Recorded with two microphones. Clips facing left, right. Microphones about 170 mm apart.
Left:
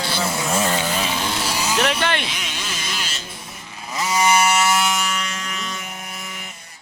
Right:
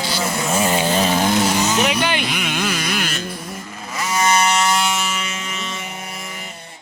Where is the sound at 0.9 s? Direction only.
40° right (ahead or behind).